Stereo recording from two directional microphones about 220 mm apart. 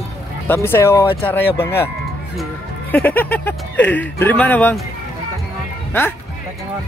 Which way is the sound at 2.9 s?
10° left (ahead or behind).